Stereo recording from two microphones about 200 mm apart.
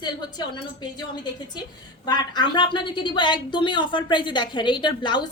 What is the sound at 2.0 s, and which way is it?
A woman's voice, 20° left (ahead or behind).